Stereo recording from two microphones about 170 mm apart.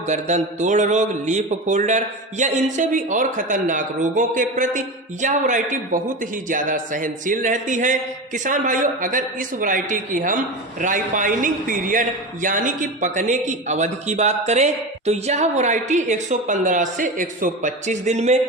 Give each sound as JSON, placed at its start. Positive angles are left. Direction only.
{"t": 0.1, "sound": "speech", "side_deg": -45}